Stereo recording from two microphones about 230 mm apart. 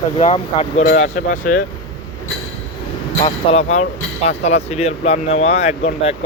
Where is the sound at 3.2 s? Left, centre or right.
Left.